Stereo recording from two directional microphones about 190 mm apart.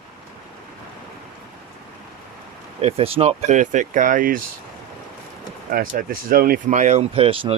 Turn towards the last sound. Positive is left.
turn(degrees=-30)  # may be behind; listen again after turning